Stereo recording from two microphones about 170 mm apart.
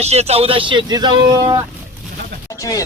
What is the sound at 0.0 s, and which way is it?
Speech, 40° right (ahead or behind).